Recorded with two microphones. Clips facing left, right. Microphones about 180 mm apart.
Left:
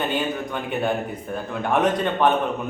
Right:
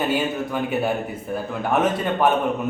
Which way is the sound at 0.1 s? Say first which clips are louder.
Right 2 dB; 5° right (ahead or behind).